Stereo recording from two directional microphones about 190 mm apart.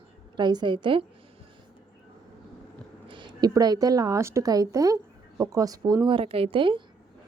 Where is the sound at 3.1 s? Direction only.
25° right (ahead or behind).